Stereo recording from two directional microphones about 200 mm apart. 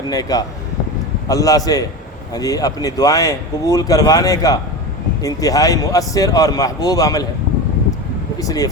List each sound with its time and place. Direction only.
0.1 s speech: 20° left (ahead or behind)
8.4 s speech: 15° left (ahead or behind)